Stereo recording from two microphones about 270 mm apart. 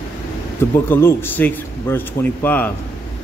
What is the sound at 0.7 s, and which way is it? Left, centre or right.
A man's voice, centre.